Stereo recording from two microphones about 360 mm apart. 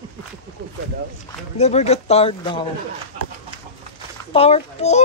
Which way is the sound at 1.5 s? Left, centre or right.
Centre.